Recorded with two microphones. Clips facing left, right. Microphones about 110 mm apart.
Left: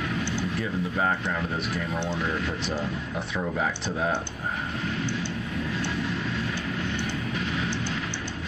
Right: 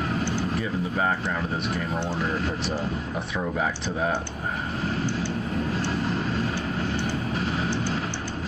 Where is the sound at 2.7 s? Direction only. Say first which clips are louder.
Right 1 dB; centre (ahead or behind).